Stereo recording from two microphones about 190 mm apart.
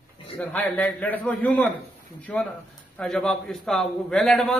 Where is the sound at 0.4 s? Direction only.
10° left (ahead or behind).